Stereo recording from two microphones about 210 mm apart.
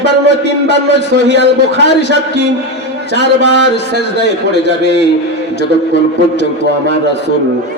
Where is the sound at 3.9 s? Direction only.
55° left (ahead or behind).